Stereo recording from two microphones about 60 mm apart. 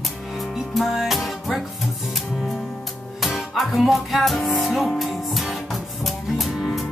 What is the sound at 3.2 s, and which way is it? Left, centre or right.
Music, centre.